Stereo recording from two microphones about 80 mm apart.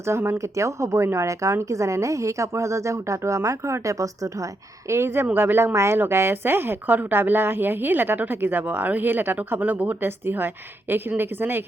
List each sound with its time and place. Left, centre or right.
0.1 s speech: right
4.9 s a woman's voice: right